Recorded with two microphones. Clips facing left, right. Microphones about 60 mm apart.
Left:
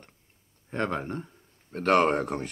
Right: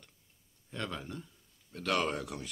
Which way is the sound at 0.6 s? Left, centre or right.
Left.